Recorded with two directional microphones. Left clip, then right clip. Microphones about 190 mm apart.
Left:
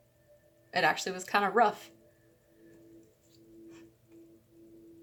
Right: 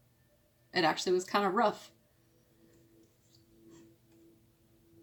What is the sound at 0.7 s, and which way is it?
Speech, 45° left (ahead or behind).